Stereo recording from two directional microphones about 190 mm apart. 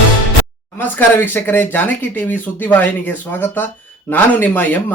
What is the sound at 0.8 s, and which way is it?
Speech, 10° left (ahead or behind).